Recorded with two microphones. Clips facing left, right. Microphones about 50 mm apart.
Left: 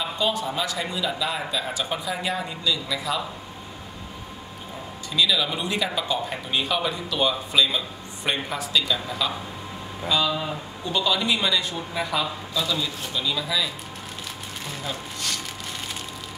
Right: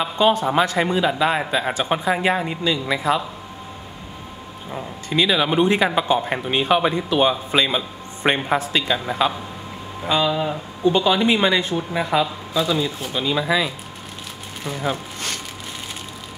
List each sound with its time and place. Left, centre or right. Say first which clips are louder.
0.0 s speech: right 7 dB; right
5.1 s speech: right 5 dB; right
10.3 s speech: right 5 dB; centre; by 13.7 s right
14.9 s speech: right 5 dB; right